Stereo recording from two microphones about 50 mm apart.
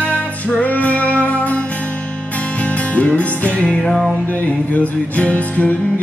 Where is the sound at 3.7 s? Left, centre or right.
Centre.